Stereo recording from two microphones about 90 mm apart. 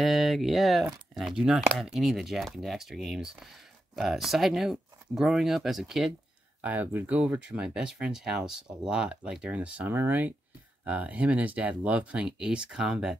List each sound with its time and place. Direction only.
0.0 s speech: centre (ahead or behind)
6.6 s speech: 20° right (ahead or behind)